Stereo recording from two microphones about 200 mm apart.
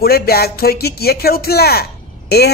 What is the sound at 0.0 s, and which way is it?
Speech, 50° left (ahead or behind).